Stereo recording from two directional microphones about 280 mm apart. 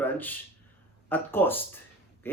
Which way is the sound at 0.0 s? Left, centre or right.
Centre.